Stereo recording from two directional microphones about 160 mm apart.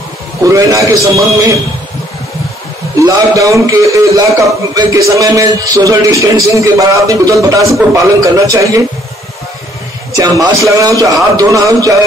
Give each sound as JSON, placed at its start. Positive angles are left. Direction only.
{"t": 0.4, "sound": "a man's voice", "side_deg": -20}
{"t": 3.0, "sound": "a man's voice", "side_deg": -20}
{"t": 10.1, "sound": "a man's voice", "side_deg": -20}